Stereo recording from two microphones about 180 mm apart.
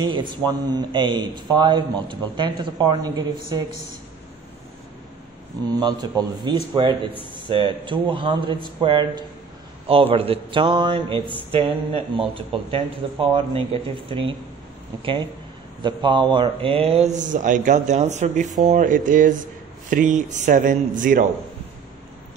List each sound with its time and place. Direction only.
0.0 s a man's voice: 25° right (ahead or behind)
5.8 s a man's voice: 20° right (ahead or behind)
15.8 s a man's voice: 25° right (ahead or behind); by 21.3 s 45° right (ahead or behind)